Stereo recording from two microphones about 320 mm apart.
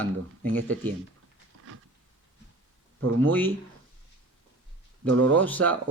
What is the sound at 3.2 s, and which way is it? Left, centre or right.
Speech, centre.